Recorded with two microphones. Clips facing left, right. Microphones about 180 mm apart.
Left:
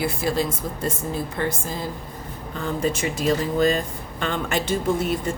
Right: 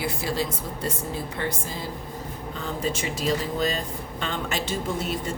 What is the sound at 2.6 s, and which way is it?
Speech, 50° left (ahead or behind).